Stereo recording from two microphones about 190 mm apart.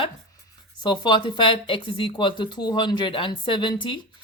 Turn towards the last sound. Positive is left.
turn(degrees=25)  # may be behind; listen again after turning